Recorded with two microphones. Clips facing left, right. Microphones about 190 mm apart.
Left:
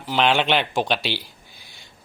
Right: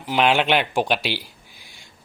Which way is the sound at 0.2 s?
Centre (ahead or behind).